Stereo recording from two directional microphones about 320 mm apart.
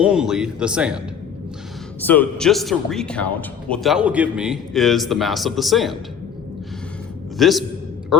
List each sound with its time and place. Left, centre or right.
0.0 s a man's voice: centre
2.0 s a man's voice: centre
7.3 s a man's voice: centre